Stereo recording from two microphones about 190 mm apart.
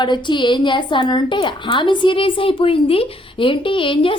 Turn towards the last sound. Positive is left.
turn(degrees=25)  # may be behind; listen again after turning